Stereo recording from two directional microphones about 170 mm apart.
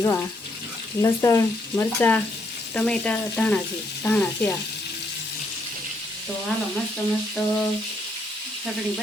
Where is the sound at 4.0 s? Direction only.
10° left (ahead or behind).